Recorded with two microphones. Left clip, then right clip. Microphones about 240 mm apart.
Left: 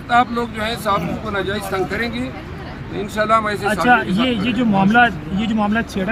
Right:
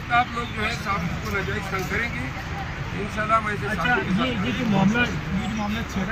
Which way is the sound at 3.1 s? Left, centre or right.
Left.